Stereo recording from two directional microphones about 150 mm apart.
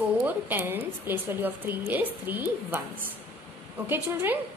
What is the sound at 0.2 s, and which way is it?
A woman's voice, 10° right (ahead or behind).